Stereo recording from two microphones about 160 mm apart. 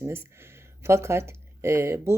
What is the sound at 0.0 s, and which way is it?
Speech, 15° right (ahead or behind).